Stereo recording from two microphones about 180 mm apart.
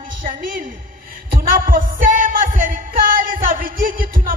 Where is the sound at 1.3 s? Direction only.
55° right (ahead or behind).